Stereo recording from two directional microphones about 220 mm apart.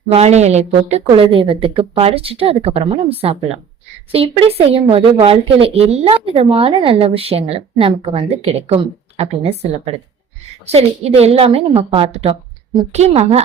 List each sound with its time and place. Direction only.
0.1 s speech: 30° right (ahead or behind)